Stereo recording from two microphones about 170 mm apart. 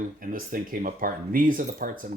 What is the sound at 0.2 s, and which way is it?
Speech, 55° right (ahead or behind).